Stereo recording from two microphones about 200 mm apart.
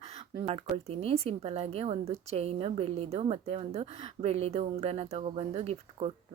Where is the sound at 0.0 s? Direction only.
30° right (ahead or behind).